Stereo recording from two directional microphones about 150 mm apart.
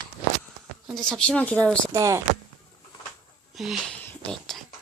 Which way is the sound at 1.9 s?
20° right (ahead or behind).